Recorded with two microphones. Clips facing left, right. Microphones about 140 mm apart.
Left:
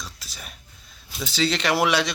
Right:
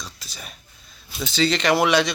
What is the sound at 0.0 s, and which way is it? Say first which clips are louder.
Whispering: right 1 dB; 5° left (ahead or behind).